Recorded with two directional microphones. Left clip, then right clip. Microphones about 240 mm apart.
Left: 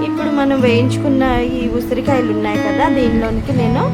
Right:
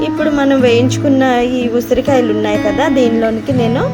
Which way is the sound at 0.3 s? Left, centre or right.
Centre.